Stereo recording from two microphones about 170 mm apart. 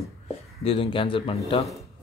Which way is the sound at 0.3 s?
35° left (ahead or behind).